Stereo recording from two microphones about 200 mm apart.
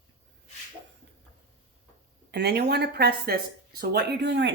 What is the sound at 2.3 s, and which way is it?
Speech, 55° right (ahead or behind).